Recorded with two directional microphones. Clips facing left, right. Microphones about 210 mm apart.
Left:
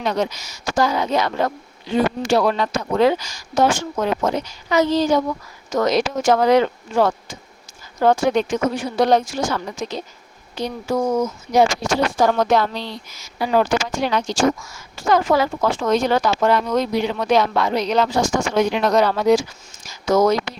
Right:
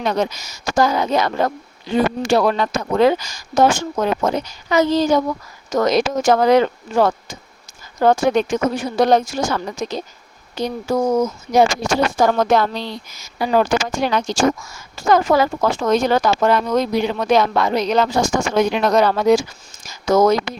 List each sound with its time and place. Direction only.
0.0 s speech: 50° right (ahead or behind)